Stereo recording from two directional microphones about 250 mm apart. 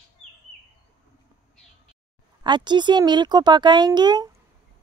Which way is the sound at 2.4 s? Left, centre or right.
Centre.